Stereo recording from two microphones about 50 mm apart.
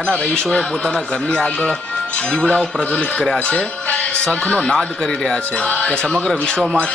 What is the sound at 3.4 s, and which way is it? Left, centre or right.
Music, left.